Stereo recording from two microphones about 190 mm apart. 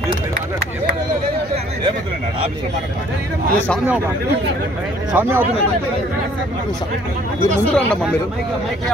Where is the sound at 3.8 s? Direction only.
10° right (ahead or behind).